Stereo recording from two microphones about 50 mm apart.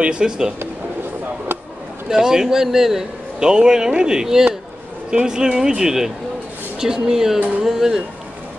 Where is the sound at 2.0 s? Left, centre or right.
Centre.